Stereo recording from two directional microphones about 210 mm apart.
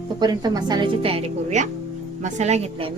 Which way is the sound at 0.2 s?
20° right (ahead or behind).